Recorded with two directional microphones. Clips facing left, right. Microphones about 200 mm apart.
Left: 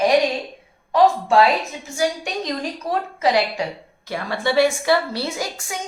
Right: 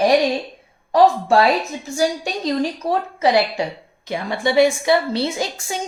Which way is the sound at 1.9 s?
30° right (ahead or behind).